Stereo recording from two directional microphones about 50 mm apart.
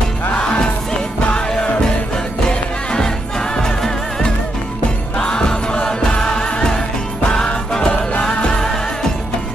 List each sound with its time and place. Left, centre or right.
0.4 s music: centre
2.9 s music: centre